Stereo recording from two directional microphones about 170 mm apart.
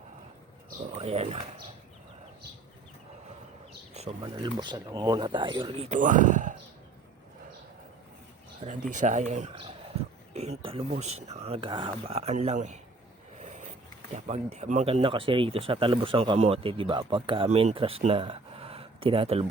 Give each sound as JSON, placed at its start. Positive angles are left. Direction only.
{"t": 0.9, "sound": "speech", "side_deg": -35}
{"t": 4.2, "sound": "speech", "side_deg": -25}
{"t": 6.0, "sound": "speech", "side_deg": -50}
{"t": 8.6, "sound": "speech", "side_deg": -45}